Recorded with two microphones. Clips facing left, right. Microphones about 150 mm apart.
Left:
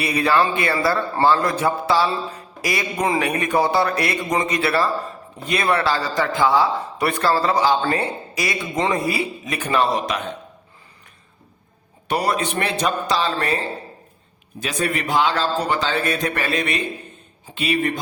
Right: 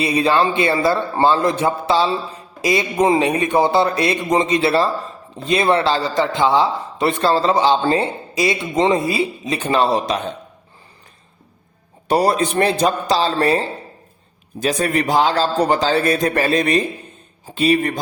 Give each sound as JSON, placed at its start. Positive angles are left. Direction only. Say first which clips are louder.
{"t": 0.0, "sound": "speech", "louder": "right 3 dB", "side_deg": -25}
{"t": 12.0, "sound": "a man's voice", "louder": "right 5 dB", "side_deg": -35}